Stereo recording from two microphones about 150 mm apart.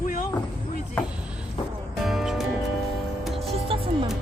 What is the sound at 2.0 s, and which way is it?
Music, centre (ahead or behind).